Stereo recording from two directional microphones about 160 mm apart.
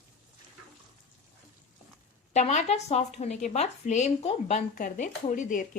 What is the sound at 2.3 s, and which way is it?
A woman's voice, 40° left (ahead or behind).